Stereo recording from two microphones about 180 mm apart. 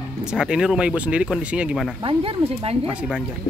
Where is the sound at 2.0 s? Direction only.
30° right (ahead or behind).